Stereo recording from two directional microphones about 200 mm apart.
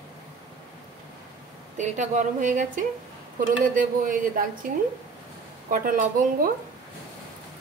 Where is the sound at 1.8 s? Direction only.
40° right (ahead or behind).